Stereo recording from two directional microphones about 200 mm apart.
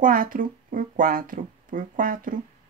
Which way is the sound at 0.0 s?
45° right (ahead or behind).